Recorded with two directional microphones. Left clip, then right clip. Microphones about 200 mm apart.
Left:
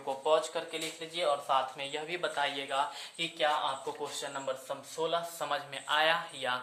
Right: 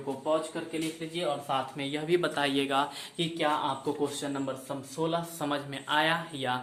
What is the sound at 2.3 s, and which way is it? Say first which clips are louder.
Speech: right 4 dB; 25° right (ahead or behind).